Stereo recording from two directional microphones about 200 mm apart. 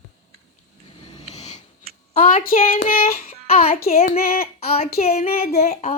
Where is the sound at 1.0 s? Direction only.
20° left (ahead or behind).